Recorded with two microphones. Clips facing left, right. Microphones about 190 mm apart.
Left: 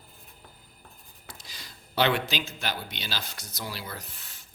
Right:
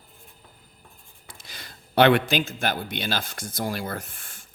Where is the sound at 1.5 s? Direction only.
55° right (ahead or behind).